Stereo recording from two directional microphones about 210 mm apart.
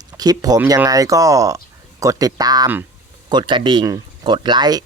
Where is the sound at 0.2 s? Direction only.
20° right (ahead or behind).